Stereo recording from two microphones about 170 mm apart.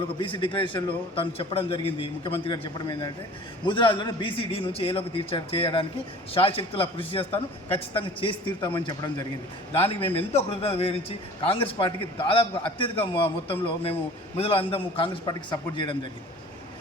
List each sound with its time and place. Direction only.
0.2 s a man's voice: 30° left (ahead or behind)
3.7 s a man's voice: 30° left (ahead or behind)